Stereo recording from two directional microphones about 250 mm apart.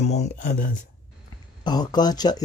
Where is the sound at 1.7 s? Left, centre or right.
Centre.